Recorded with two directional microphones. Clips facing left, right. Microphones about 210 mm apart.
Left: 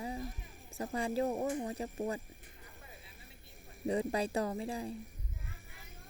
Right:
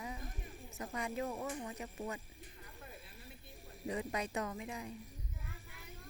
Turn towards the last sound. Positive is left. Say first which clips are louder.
# left 6 dB
turn(degrees=30)  # may be behind; listen again after turning